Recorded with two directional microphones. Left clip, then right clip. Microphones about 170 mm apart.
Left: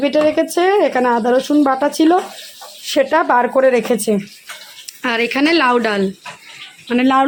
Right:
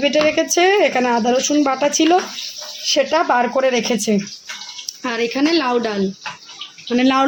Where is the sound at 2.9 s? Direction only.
10° left (ahead or behind).